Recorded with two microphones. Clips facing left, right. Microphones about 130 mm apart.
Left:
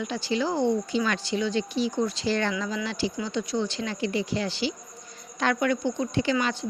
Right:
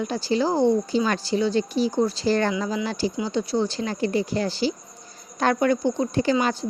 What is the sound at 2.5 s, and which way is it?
Speech, 30° right (ahead or behind).